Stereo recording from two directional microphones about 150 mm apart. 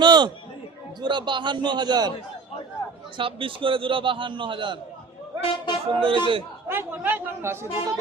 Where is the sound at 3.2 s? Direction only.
35° right (ahead or behind).